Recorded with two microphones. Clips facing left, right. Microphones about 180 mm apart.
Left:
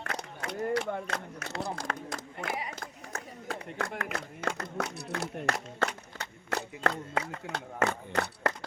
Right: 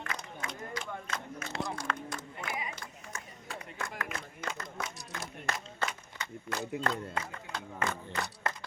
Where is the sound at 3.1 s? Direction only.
60° left (ahead or behind).